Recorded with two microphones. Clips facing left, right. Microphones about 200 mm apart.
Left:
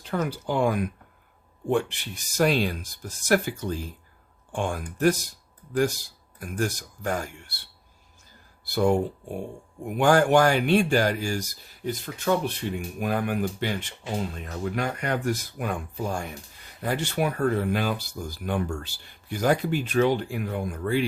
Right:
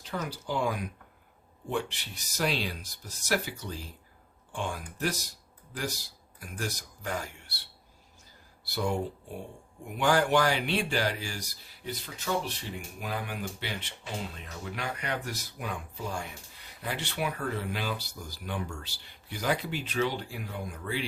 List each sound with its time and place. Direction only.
0.0 s speech: 55° left (ahead or behind)
8.6 s speech: 50° left (ahead or behind)